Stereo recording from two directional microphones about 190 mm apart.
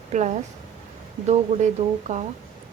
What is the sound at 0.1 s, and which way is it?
Speech, 40° right (ahead or behind).